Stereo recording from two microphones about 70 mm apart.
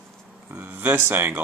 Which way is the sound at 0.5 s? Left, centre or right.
Right.